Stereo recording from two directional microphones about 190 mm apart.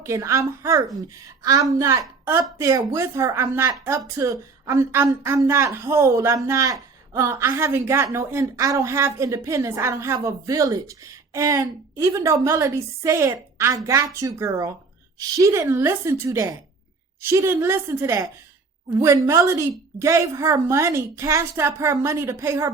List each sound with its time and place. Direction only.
0.0 s speech: 15° right (ahead or behind)